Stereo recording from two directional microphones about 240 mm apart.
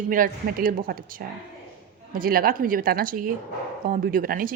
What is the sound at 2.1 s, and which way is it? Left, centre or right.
Speech, right.